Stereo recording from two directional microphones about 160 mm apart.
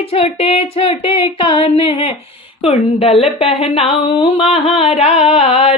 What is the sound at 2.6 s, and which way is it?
A woman's voice, 35° left (ahead or behind).